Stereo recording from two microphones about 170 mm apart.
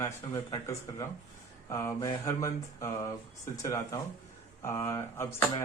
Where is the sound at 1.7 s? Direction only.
20° left (ahead or behind).